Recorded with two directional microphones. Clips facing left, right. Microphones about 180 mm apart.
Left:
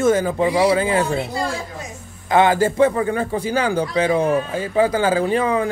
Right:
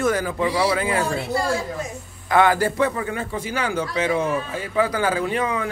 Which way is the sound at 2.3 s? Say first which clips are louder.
Left 2 dB; 25° left (ahead or behind).